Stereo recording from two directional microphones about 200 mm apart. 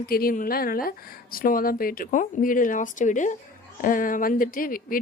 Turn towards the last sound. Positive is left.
turn(degrees=45)  # may be behind; listen again after turning